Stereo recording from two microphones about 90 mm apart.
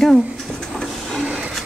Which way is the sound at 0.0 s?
5° left (ahead or behind).